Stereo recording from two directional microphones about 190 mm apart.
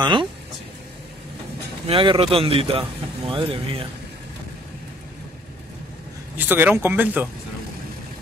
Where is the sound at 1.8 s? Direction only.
30° right (ahead or behind).